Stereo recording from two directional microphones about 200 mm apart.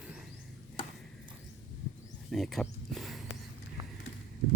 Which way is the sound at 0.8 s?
25° left (ahead or behind).